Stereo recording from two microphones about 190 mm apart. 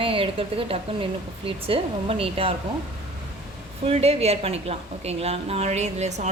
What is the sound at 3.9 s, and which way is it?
A woman's voice, 35° right (ahead or behind).